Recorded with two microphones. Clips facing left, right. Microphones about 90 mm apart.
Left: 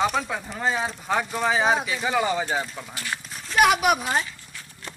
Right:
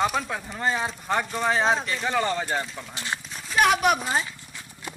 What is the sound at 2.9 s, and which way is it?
Speech, 20° right (ahead or behind).